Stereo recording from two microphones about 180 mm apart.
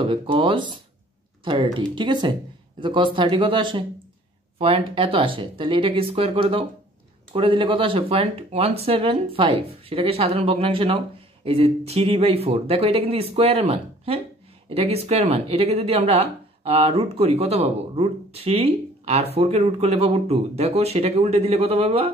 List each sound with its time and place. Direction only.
0.0 s speech: 30° right (ahead or behind)